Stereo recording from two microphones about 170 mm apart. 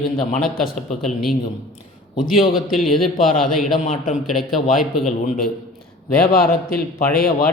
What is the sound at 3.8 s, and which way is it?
Speech, 55° left (ahead or behind).